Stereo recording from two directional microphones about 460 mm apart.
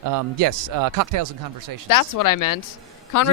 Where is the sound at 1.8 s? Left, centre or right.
Left.